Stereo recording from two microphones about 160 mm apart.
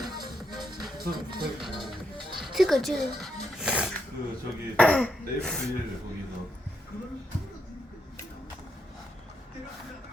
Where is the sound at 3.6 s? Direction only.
5° right (ahead or behind).